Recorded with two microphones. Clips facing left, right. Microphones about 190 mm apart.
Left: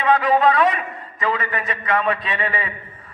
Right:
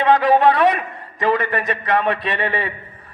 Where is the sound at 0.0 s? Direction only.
70° right (ahead or behind).